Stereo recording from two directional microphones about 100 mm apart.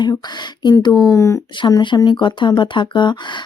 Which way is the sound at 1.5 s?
45° left (ahead or behind).